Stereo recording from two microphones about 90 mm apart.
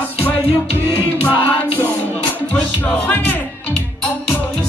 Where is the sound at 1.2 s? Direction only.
20° right (ahead or behind).